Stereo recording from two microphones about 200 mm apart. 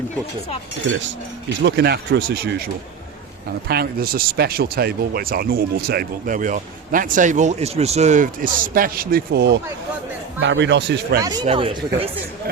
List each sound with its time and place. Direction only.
1.6 s speech: 55° right (ahead or behind)
3.7 s speech: 50° right (ahead or behind)
11.2 s speech: 20° right (ahead or behind)